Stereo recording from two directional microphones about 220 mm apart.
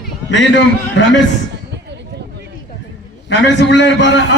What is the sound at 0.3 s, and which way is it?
Speech, 55° left (ahead or behind).